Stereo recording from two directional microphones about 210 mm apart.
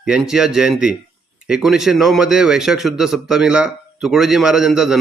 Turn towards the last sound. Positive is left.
turn(degrees=-5)  # may be behind; listen again after turning